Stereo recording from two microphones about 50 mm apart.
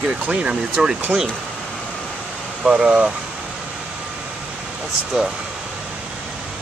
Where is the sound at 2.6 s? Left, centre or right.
Centre.